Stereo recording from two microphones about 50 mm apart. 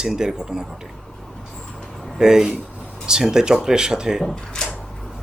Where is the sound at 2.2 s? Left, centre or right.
Centre.